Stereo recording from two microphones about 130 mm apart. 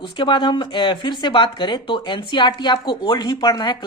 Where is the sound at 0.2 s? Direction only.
35° left (ahead or behind).